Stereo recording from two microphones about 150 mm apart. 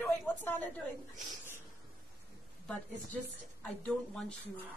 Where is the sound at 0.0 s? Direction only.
10° left (ahead or behind).